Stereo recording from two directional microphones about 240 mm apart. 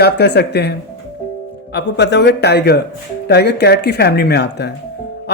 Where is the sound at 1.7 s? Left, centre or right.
Left.